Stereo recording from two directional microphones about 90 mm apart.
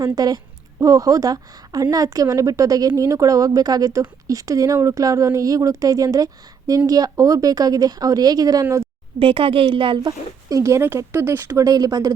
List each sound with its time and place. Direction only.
0.0 s speech: 45° right (ahead or behind)
9.1 s a woman's voice: 85° right
10.1 s speech: 40° right (ahead or behind)
11.6 s speech: 45° right (ahead or behind)